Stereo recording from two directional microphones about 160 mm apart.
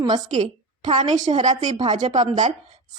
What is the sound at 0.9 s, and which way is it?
Speech, 30° right (ahead or behind).